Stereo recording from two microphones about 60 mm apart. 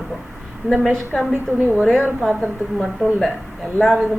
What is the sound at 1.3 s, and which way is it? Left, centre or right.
Speech, right.